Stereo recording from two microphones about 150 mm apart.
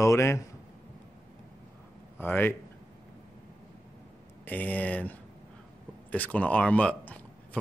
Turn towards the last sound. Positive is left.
turn(degrees=10)  # may be behind; listen again after turning